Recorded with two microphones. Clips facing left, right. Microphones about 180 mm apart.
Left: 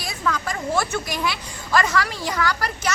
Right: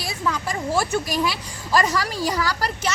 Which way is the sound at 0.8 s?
35° right (ahead or behind).